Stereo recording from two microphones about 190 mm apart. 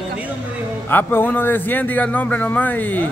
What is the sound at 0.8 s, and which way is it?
A man's voice, 10° left (ahead or behind).